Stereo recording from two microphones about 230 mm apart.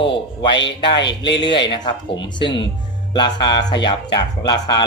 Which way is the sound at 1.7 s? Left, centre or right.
Centre.